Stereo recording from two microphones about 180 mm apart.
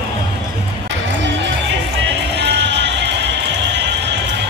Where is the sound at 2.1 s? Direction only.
75° right (ahead or behind).